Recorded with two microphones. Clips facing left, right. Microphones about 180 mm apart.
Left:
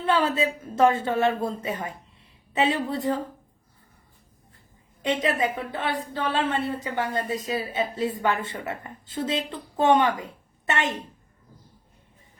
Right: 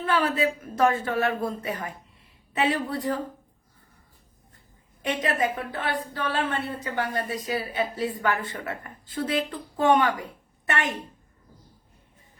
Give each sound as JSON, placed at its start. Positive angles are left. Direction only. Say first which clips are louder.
{"t": 0.0, "sound": "a woman's voice", "louder": "left 1 dB", "side_deg": 25}
{"t": 5.0, "sound": "a woman's voice", "louder": "left 1 dB", "side_deg": 25}